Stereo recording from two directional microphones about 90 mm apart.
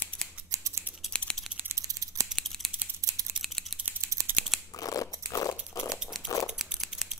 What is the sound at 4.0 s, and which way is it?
Scissors, 35° right (ahead or behind).